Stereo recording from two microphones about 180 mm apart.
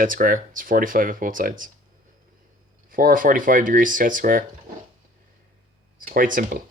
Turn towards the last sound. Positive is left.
turn(degrees=-50)  # may be behind; listen again after turning